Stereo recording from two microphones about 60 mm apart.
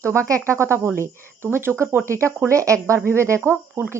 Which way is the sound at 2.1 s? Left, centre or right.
Right.